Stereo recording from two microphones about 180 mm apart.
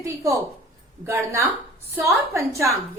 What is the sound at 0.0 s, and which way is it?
A woman's voice, 15° right (ahead or behind).